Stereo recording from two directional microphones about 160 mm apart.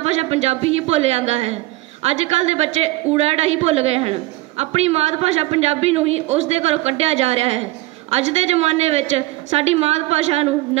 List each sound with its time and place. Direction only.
0.0 s a woman's voice: 40° right (ahead or behind)